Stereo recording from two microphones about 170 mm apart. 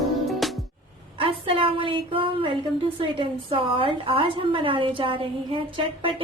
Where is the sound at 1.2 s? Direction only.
30° right (ahead or behind).